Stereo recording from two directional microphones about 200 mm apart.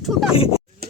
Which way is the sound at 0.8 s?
50° right (ahead or behind).